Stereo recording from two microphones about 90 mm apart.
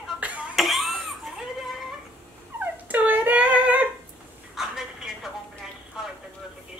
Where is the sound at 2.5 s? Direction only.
20° right (ahead or behind).